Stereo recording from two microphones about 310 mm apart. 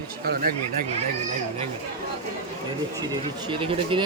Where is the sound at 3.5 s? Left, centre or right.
Centre.